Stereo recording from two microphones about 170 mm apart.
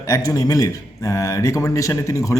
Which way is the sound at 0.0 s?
20° left (ahead or behind).